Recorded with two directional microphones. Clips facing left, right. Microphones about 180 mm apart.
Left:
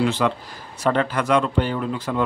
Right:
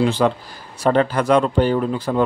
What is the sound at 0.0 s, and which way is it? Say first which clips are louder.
A man's voice: right 3 dB; 35° right (ahead or behind).